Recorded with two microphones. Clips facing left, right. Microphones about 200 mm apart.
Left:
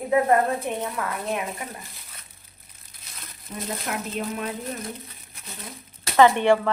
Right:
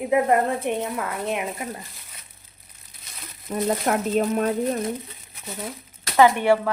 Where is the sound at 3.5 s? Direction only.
50° right (ahead or behind).